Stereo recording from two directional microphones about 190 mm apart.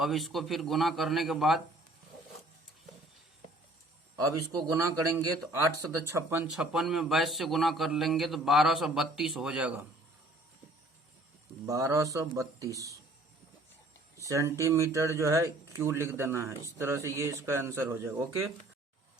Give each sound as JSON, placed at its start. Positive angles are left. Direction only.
{"t": 0.0, "sound": "a man's voice", "side_deg": 0}
{"t": 4.2, "sound": "speech", "side_deg": -20}
{"t": 6.6, "sound": "a man's voice", "side_deg": 0}
{"t": 11.6, "sound": "speech", "side_deg": -15}
{"t": 14.3, "sound": "speech", "side_deg": -15}